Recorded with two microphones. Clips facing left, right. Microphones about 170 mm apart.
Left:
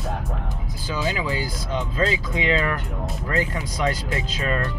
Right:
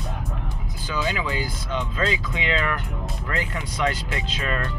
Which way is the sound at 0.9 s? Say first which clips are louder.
Left 1 dB; 30° left (ahead or behind).